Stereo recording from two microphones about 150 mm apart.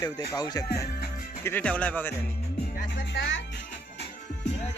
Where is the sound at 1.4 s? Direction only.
15° left (ahead or behind).